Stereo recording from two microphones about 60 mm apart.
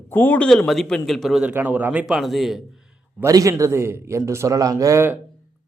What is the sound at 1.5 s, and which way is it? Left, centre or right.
Speech, right.